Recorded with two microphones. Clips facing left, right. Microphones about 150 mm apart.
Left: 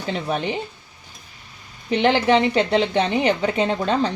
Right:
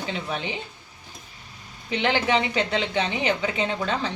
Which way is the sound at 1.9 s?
35° left (ahead or behind).